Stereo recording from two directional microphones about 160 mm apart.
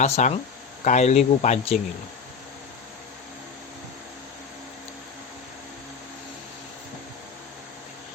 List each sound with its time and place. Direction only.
0.0 s speech: 50° left (ahead or behind)